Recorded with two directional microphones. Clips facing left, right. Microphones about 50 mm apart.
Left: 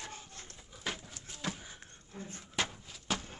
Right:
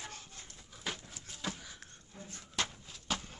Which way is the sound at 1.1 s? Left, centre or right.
Centre.